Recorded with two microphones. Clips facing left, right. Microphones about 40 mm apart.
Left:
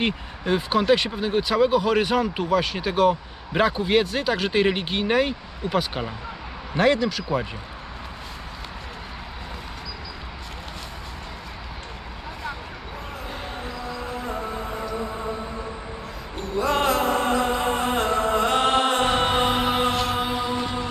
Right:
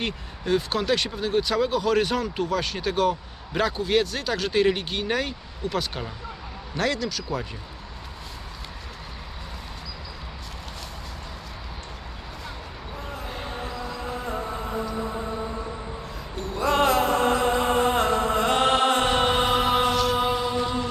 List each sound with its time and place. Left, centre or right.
0.0 s a man's voice: centre
16.4 s music: centre
19.9 s music: left